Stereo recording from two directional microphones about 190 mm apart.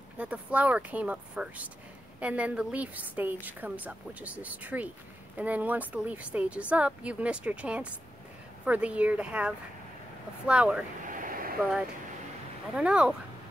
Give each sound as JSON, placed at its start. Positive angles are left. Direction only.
{"t": 0.2, "sound": "a woman's voice", "side_deg": -5}
{"t": 11.1, "sound": "vehicle", "side_deg": -45}
{"t": 12.7, "sound": "speech", "side_deg": -5}